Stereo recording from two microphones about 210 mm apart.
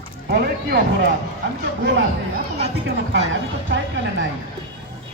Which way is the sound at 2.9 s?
60° right (ahead or behind).